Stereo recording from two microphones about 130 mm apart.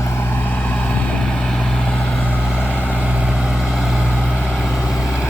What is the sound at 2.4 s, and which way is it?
Vehicle, 5° right (ahead or behind).